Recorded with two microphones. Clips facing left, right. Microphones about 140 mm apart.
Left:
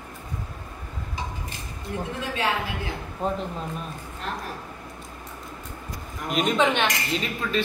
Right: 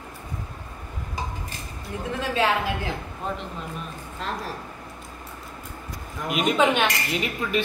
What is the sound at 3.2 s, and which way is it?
Speech, 40° left (ahead or behind).